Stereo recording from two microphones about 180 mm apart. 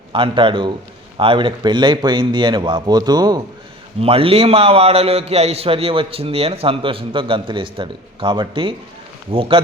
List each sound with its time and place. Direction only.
0.1 s a man's voice: 25° right (ahead or behind)